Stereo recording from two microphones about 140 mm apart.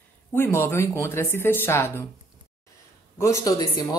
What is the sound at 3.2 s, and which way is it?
Speech, 25° left (ahead or behind).